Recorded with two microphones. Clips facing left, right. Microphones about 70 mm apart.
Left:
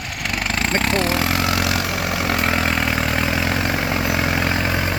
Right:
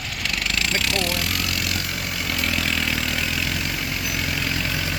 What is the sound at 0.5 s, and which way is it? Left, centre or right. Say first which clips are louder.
Speech: left 6 dB; left.